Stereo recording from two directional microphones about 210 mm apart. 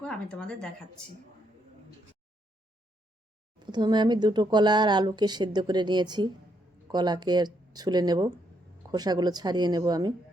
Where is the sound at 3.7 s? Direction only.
20° right (ahead or behind).